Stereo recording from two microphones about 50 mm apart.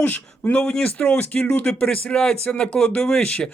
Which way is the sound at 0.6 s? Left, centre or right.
Left.